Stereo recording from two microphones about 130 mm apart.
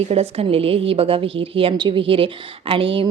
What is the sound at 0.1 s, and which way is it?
A woman's voice, 50° right (ahead or behind).